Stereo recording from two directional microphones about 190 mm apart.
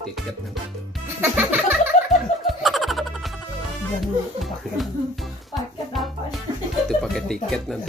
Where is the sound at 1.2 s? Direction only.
10° right (ahead or behind).